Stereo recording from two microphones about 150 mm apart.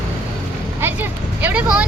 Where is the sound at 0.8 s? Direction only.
10° right (ahead or behind).